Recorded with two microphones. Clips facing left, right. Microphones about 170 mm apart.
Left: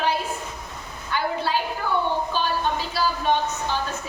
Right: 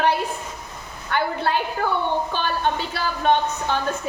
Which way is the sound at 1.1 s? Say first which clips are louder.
Right 2 dB; 60° right (ahead or behind).